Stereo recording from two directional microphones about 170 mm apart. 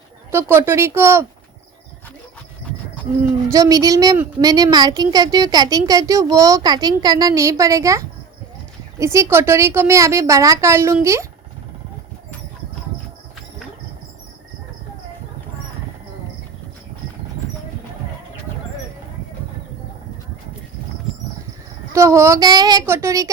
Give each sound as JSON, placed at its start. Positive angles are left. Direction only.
{"t": 0.3, "sound": "a woman's voice", "side_deg": -15}
{"t": 3.5, "sound": "a woman's voice", "side_deg": -20}
{"t": 21.9, "sound": "a woman's voice", "side_deg": -15}